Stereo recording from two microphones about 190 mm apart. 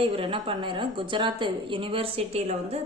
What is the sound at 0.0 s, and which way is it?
A woman's voice, 30° right (ahead or behind).